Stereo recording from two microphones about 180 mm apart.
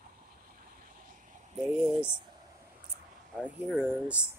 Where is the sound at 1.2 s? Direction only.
40° right (ahead or behind).